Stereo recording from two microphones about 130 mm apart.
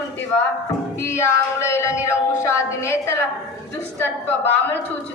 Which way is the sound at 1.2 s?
20° left (ahead or behind).